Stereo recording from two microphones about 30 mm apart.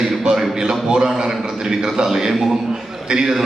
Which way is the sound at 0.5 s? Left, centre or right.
Right.